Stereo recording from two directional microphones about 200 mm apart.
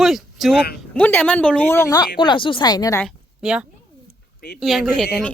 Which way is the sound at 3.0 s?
Centre (ahead or behind).